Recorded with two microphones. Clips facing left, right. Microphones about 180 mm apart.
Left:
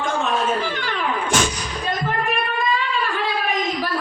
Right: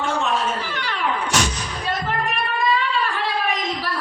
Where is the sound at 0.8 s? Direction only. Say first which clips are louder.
Left 1 dB; 50° left (ahead or behind).